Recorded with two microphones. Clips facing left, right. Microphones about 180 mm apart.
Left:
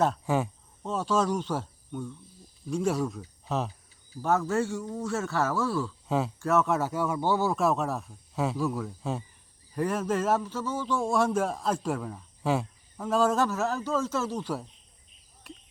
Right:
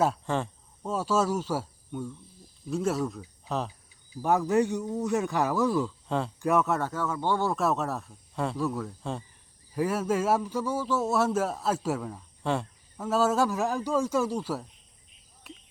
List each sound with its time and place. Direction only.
0.3 s speech: 5° left (ahead or behind)
0.8 s a man's voice: 10° right (ahead or behind)
4.1 s a man's voice: 15° right (ahead or behind)
6.1 s speech: 5° left (ahead or behind)
6.4 s speech: 15° right (ahead or behind)
6.7 s a man's voice: 5° left (ahead or behind)
15.5 s cricket: centre (ahead or behind)